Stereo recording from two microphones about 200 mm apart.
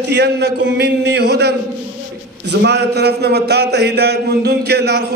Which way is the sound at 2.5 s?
60° right (ahead or behind).